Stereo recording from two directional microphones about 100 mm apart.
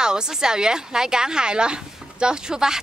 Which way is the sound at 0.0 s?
10° right (ahead or behind).